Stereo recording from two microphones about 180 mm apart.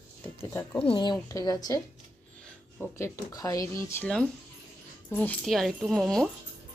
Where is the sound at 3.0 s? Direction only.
20° left (ahead or behind).